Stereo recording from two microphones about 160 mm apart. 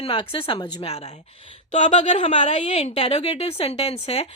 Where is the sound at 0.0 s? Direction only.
30° left (ahead or behind).